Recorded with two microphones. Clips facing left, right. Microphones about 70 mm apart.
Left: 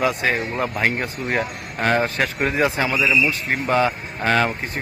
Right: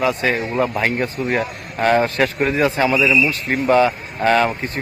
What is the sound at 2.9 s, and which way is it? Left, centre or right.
A man's voice, centre.